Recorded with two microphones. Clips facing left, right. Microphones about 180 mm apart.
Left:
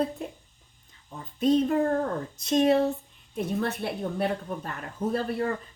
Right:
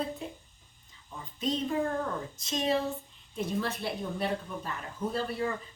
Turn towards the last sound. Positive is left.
turn(degrees=50)  # may be behind; listen again after turning